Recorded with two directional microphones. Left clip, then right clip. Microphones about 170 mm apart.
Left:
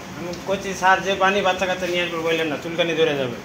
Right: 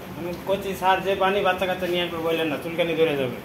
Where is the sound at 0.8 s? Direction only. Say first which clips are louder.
Left 4 dB; 15° left (ahead or behind).